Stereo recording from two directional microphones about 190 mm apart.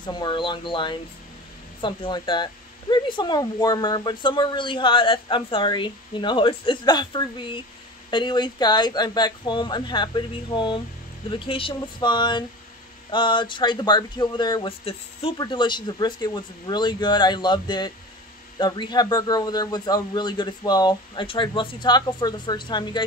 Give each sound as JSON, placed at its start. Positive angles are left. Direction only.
{"t": 0.0, "sound": "speech", "side_deg": 25}